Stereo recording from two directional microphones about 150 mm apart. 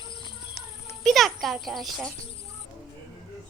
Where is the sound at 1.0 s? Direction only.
Centre (ahead or behind).